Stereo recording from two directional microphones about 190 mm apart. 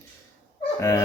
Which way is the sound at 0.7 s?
15° left (ahead or behind).